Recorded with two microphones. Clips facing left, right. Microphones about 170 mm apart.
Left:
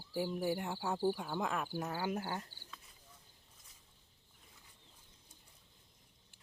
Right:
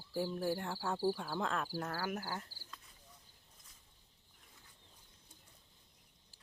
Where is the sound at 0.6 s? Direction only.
20° left (ahead or behind).